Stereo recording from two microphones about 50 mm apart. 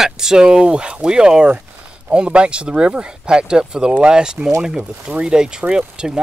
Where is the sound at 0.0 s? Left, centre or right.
Centre.